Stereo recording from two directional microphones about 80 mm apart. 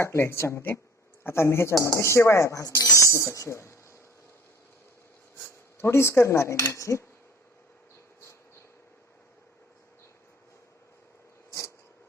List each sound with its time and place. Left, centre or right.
0.0 s speech: left
5.7 s speech: left